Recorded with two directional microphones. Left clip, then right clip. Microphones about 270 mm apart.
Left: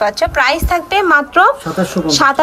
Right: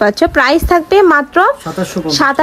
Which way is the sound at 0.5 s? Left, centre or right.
Right.